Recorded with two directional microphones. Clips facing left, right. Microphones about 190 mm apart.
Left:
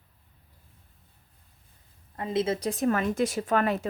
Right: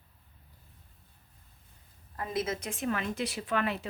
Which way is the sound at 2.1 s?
25° left (ahead or behind).